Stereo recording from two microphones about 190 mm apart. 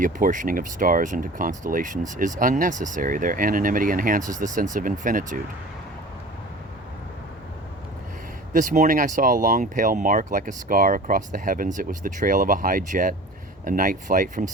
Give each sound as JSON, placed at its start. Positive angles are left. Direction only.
{"t": 0.0, "sound": "speech", "side_deg": -45}
{"t": 8.5, "sound": "speech", "side_deg": -40}